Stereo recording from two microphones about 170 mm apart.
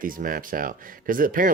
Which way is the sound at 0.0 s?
55° right (ahead or behind).